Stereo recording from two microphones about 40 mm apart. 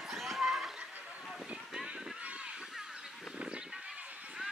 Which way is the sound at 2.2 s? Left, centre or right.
Right.